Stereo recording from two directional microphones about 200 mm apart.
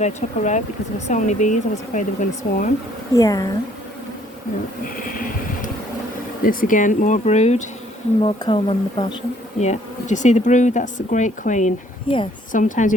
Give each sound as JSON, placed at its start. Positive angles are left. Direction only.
{"t": 0.0, "sound": "speech", "side_deg": 35}
{"t": 3.2, "sound": "speech", "side_deg": 15}
{"t": 5.0, "sound": "a sound", "side_deg": 45}
{"t": 6.4, "sound": "speech", "side_deg": 45}
{"t": 9.6, "sound": "speech", "side_deg": 35}
{"t": 12.0, "sound": "speech", "side_deg": 25}
{"t": 12.5, "sound": "speech", "side_deg": 40}